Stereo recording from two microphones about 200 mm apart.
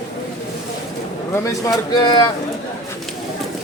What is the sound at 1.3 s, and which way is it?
Speech, 15° left (ahead or behind).